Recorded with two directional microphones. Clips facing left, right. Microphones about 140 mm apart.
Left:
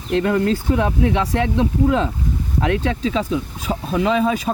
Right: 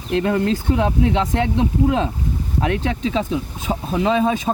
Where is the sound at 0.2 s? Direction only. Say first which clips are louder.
Left 1 dB; 25° right (ahead or behind).